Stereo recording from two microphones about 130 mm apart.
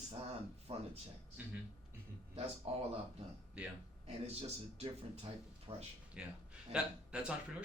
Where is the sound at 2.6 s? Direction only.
50° right (ahead or behind).